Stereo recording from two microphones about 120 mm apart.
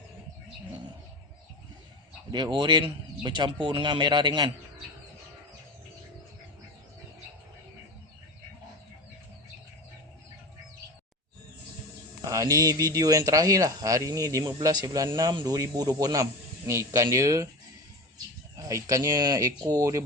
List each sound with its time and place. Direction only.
2.3 s speech: 40° right (ahead or behind)
12.2 s speech: 25° right (ahead or behind)
18.5 s speech: 25° right (ahead or behind)